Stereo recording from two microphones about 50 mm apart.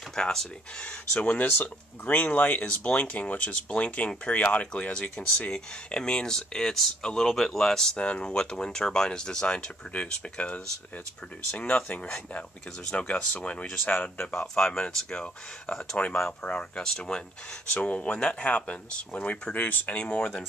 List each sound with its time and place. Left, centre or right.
0.1 s speech: centre
1.2 s speech: left
13.8 s speech: left
14.4 s speech: left